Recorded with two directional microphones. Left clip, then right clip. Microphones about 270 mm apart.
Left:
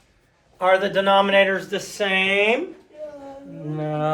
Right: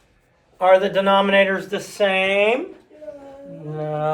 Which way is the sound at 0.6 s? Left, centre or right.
Right.